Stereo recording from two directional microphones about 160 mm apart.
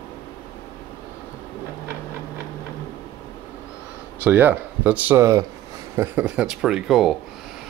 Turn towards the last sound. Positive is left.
turn(degrees=0)  # may be behind; listen again after turning